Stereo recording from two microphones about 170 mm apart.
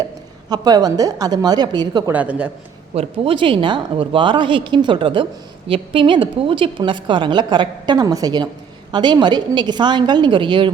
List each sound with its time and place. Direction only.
0.5 s a woman's voice: 25° right (ahead or behind)
2.1 s a man's voice: 10° right (ahead or behind)
2.9 s a woman's voice: 35° right (ahead or behind)